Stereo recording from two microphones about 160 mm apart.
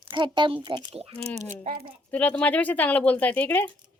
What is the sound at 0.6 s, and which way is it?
Speech, 30° right (ahead or behind).